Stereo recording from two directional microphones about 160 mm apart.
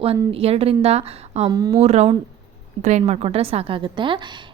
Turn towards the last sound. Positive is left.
turn(degrees=-30)  # may be behind; listen again after turning